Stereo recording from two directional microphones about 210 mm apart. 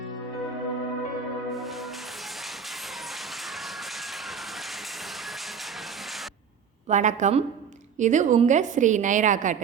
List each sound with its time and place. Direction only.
1.5 s music: centre (ahead or behind)
6.8 s a woman's voice: 35° right (ahead or behind)